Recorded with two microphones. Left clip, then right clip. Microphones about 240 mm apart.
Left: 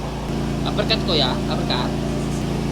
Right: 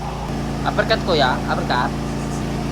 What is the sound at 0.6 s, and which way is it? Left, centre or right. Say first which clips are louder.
Speech: right 4 dB; right.